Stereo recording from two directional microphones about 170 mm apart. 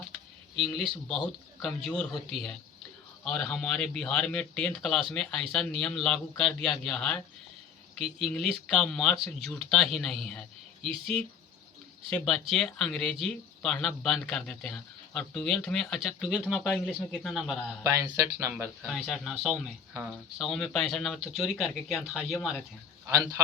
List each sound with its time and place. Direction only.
0.6 s speech: centre (ahead or behind)
17.8 s speech: 20° right (ahead or behind)
18.8 s speech: centre (ahead or behind)